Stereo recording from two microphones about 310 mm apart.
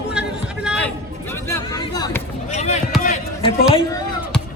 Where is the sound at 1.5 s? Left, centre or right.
Centre.